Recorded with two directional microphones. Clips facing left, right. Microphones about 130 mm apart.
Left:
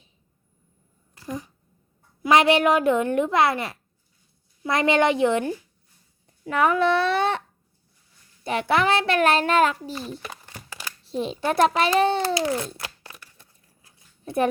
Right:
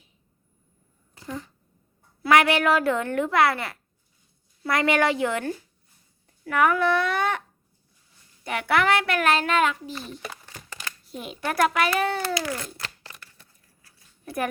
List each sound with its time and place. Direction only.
1.3 s a child's voice: 15° left (ahead or behind)
8.4 s a child's voice: 25° left (ahead or behind)
10.2 s crumpling: 20° left (ahead or behind)
11.0 s a child's voice: 30° left (ahead or behind)
12.8 s a sound: 10° left (ahead or behind)